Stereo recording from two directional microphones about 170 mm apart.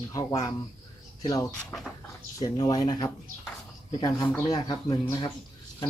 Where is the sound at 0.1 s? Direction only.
20° left (ahead or behind).